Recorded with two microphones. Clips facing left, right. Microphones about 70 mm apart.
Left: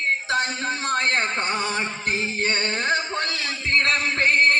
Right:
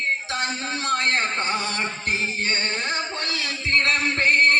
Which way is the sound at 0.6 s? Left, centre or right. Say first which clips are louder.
Even; left.